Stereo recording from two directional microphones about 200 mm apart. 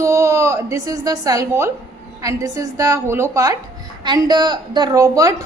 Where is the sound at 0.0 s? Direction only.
15° right (ahead or behind).